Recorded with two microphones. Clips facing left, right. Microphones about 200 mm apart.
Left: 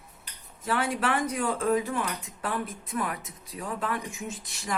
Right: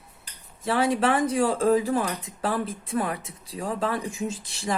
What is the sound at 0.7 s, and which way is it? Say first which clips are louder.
Speech: right 5 dB; 30° right (ahead or behind).